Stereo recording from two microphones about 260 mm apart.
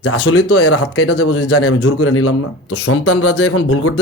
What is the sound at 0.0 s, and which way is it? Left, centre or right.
A man's voice, left.